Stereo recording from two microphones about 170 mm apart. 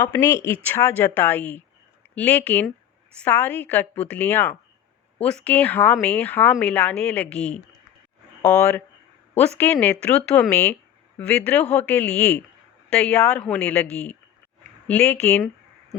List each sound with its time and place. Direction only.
0.0 s speech: 20° left (ahead or behind)